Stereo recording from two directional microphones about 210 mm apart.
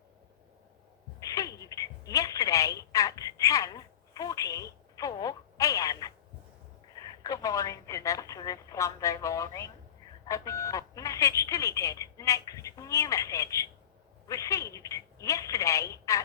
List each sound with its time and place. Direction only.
1.2 s telephone: 15° left (ahead or behind)
7.3 s telephone: 15° left (ahead or behind)